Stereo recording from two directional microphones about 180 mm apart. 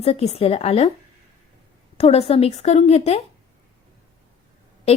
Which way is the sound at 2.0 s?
35° left (ahead or behind).